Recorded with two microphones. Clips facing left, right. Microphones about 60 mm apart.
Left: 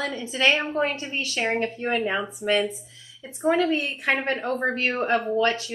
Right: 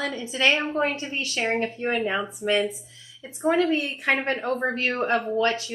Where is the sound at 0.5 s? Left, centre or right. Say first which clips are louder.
Even; centre.